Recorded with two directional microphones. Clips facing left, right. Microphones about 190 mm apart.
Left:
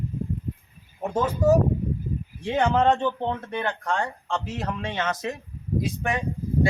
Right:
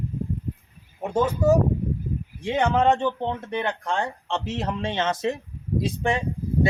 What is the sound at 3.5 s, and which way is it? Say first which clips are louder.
Speech: right 1 dB; 20° right (ahead or behind).